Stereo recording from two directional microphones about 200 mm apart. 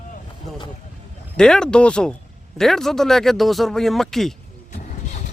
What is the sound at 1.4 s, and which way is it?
Speech, 5° left (ahead or behind).